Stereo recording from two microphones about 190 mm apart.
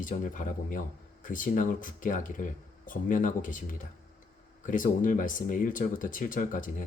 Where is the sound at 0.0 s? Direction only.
45° left (ahead or behind).